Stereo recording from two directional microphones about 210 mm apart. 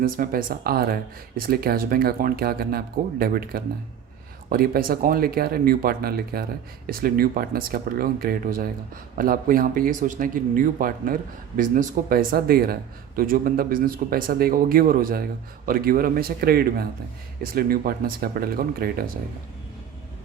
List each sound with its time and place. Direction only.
0.0 s speech: 40° right (ahead or behind)